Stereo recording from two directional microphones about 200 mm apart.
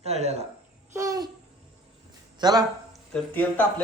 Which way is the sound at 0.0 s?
30° right (ahead or behind).